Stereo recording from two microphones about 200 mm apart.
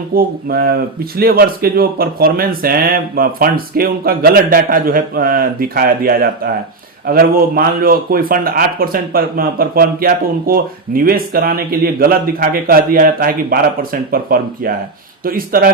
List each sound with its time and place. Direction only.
0.1 s a man's voice: 50° right (ahead or behind)